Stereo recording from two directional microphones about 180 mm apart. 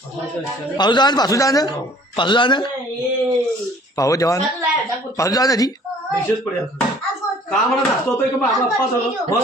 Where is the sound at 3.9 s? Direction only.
20° left (ahead or behind).